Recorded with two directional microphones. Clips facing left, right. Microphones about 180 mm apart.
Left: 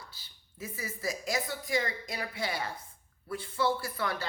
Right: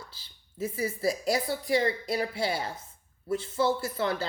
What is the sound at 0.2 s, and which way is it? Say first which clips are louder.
A woman's voice: right 11 dB; 30° right (ahead or behind).